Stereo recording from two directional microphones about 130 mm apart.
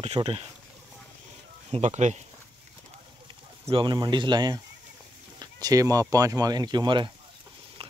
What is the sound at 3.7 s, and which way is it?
Speech, 35° right (ahead or behind).